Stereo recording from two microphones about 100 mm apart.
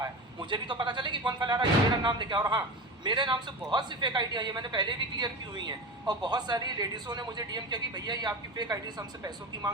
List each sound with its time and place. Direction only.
0.3 s a woman's voice: 50° right (ahead or behind)